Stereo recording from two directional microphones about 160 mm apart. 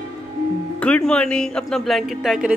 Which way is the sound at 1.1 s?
5° left (ahead or behind).